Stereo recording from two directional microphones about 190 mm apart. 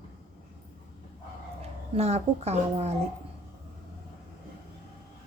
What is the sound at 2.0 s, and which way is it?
Speech, 35° right (ahead or behind).